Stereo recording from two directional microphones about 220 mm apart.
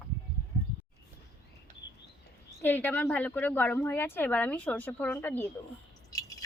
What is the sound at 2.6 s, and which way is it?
A woman's voice, 10° left (ahead or behind).